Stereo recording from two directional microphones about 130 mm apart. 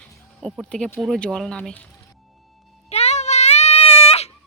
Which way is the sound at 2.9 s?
55° left (ahead or behind).